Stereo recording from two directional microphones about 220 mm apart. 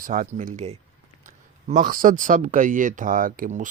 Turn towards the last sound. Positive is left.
turn(degrees=-35)  # may be behind; listen again after turning